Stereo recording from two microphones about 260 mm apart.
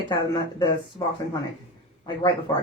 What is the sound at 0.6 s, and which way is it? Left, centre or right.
Speech, centre.